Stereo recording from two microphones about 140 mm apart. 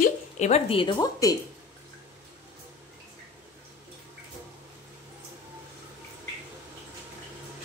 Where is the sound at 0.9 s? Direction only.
25° left (ahead or behind).